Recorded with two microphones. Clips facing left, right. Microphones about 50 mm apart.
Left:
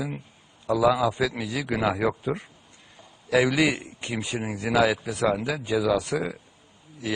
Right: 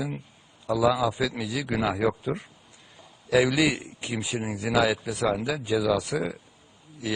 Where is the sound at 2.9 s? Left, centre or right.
Centre.